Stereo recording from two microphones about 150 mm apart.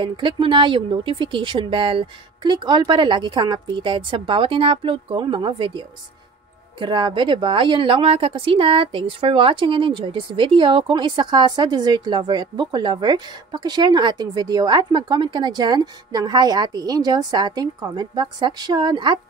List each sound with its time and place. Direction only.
0.0 s speech: 35° right (ahead or behind)